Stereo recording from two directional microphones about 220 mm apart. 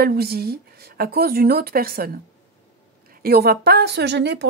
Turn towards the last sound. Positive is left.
turn(degrees=-50)  # may be behind; listen again after turning